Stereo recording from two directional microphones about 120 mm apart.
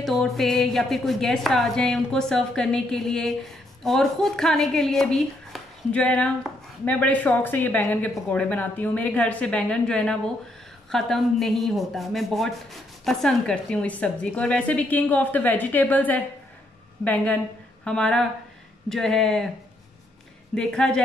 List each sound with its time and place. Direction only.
0.0 s a woman's voice: centre (ahead or behind)
20.5 s a woman's voice: 5° left (ahead or behind)